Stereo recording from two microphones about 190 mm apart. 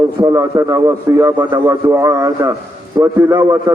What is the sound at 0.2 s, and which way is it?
A man's voice, 20° right (ahead or behind).